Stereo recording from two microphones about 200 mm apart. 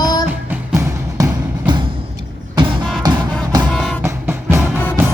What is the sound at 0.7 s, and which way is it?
Music, 15° right (ahead or behind).